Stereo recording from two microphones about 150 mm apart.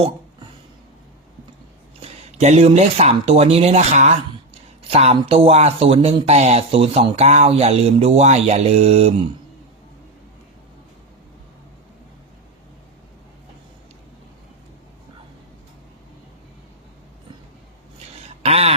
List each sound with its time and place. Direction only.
2.0 s speech: 45° right (ahead or behind)
18.4 s speech: 45° right (ahead or behind)